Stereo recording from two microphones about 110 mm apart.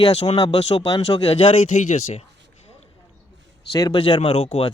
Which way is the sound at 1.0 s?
65° left (ahead or behind).